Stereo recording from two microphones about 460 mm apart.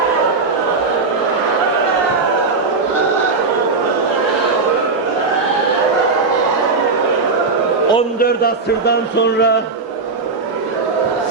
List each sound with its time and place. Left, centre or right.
7.9 s a man's voice: centre